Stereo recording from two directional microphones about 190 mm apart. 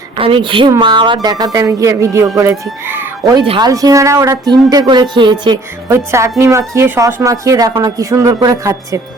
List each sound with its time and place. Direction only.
0.2 s speech: 25° right (ahead or behind)
2.8 s chicken: 10° right (ahead or behind)
3.3 s speech: 25° right (ahead or behind)